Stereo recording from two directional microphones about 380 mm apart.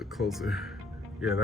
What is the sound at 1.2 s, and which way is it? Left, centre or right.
Speech, centre.